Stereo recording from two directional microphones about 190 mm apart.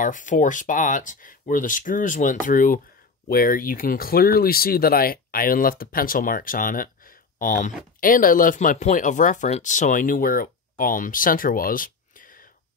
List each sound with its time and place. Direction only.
0.0 s speech: 40° left (ahead or behind)